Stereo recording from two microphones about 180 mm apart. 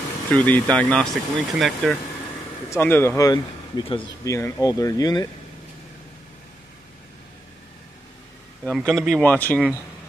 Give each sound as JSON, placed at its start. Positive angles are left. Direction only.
{"t": 0.3, "sound": "speech", "side_deg": 5}
{"t": 2.7, "sound": "speech", "side_deg": 10}
{"t": 4.2, "sound": "speech", "side_deg": 15}
{"t": 8.6, "sound": "speech", "side_deg": 0}